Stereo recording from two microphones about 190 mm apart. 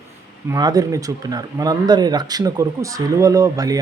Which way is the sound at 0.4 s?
20° right (ahead or behind).